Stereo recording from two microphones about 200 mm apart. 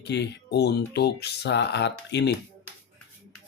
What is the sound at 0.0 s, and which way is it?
Speech, 55° left (ahead or behind).